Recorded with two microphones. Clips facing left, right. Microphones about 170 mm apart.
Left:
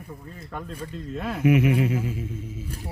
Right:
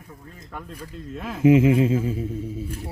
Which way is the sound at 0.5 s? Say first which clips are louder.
Left 2 dB; 10° right (ahead or behind).